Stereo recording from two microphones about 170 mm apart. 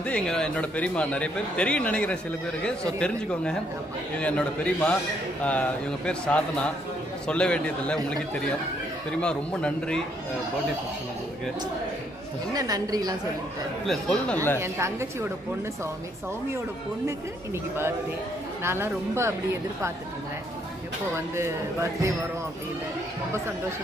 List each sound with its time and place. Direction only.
0.0 s a man's voice: 5° left (ahead or behind)
12.5 s a woman's voice: 20° right (ahead or behind)
13.8 s a man's voice: 5° left (ahead or behind)
14.6 s speech: 15° right (ahead or behind)
18.6 s speech: 15° right (ahead or behind)